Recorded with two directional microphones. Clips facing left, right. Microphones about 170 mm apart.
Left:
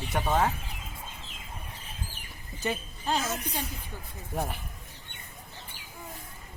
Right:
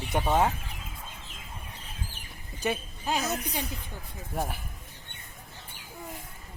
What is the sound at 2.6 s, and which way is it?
Speech, 15° right (ahead or behind).